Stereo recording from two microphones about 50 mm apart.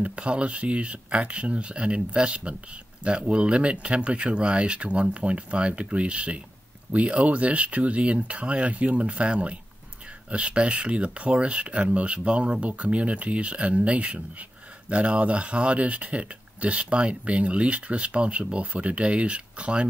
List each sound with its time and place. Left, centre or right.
0.0 s speech: right